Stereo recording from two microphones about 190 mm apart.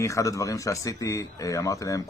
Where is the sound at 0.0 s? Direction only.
15° left (ahead or behind).